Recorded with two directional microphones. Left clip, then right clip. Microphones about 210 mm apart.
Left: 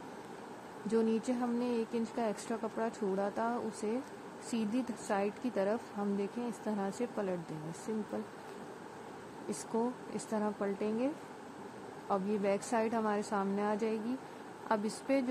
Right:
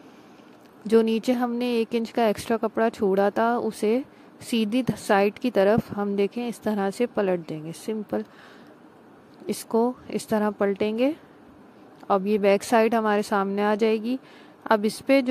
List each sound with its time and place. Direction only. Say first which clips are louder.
0.8 s speech: right 12 dB; 40° right (ahead or behind)
9.8 s speech: right 13 dB; 40° right (ahead or behind)
12.1 s speech: right 13 dB; 40° right (ahead or behind)